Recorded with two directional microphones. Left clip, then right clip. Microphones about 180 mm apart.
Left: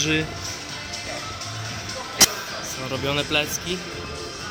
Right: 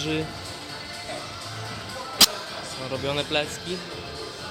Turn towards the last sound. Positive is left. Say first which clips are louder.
# left 3 dB
turn(degrees=-5)  # may be behind; listen again after turning